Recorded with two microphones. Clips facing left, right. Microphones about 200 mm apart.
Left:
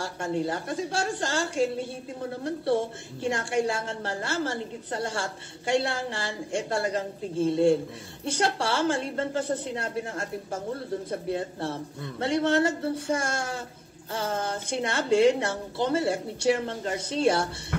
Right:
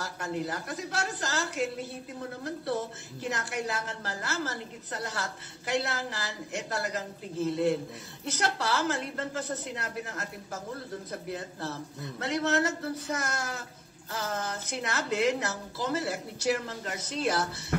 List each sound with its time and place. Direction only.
0.0 s a woman's voice: 30° left (ahead or behind)